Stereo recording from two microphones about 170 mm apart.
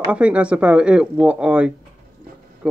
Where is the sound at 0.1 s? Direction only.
5° right (ahead or behind).